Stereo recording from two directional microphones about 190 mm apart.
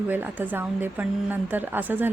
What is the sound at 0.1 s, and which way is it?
A woman's voice, 10° right (ahead or behind).